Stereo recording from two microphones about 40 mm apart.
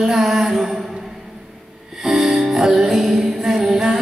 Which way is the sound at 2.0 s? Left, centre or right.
Centre.